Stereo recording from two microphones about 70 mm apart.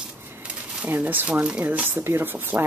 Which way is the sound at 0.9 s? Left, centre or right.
Right.